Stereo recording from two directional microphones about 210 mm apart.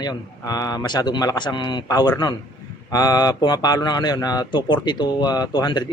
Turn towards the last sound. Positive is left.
turn(degrees=20)  # may be behind; listen again after turning